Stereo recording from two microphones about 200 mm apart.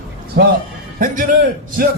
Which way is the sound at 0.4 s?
55° right (ahead or behind).